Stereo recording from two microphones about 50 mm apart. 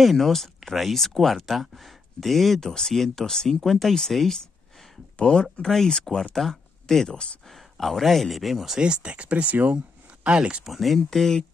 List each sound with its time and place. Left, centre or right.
0.0 s speech: centre
5.1 s speech: centre
8.7 s speech: centre
10.6 s speech: centre
11.0 s speech: centre